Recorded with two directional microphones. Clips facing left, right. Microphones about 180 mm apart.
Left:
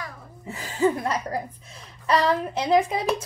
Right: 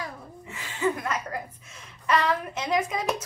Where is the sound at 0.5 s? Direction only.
35° left (ahead or behind).